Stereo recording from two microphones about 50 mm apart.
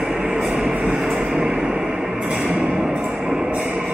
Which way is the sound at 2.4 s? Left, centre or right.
Centre.